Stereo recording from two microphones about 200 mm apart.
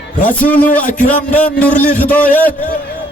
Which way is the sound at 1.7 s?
40° left (ahead or behind).